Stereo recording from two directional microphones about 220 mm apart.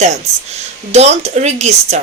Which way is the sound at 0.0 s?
30° right (ahead or behind).